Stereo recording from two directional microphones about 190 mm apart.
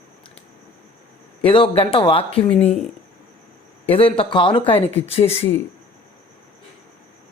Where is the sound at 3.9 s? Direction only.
30° left (ahead or behind).